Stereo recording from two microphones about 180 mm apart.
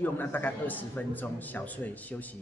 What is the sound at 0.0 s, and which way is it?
A man's voice, 10° left (ahead or behind).